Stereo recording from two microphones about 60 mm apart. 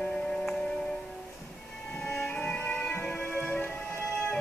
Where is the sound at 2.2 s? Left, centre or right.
Left.